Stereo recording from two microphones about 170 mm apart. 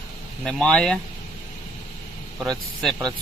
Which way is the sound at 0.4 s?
5° left (ahead or behind).